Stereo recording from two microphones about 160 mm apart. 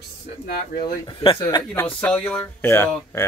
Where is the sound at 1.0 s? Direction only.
30° left (ahead or behind).